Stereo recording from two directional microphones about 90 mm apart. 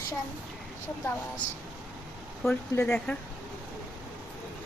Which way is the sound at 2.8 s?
10° left (ahead or behind).